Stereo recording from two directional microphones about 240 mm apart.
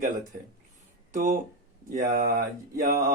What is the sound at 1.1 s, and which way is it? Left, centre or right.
Speech, right.